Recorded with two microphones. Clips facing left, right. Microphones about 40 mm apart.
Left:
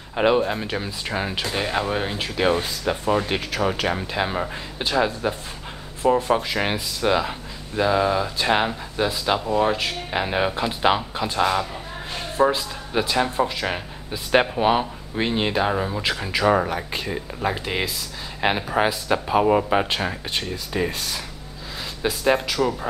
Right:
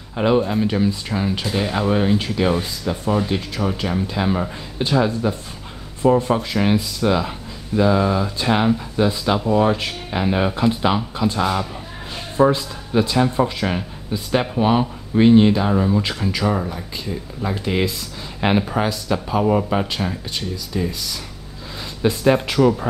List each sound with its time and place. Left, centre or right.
0.3 s speech: centre
1.0 s speech: centre
2.6 s speech: left; by 16.3 s centre
16.4 s speech: left
16.7 s speech: left
17.5 s speech: centre
18.8 s speech: left
20.2 s speech: left
22.0 s speech: centre
22.5 s speech: centre